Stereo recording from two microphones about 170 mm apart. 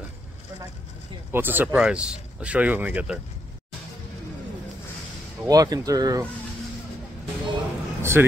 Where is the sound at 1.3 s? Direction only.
10° right (ahead or behind).